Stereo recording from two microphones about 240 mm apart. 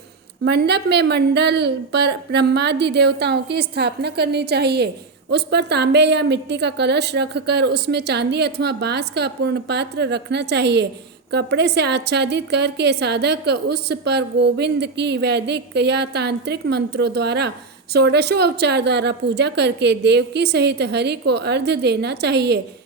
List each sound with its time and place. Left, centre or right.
0.4 s a woman's voice: right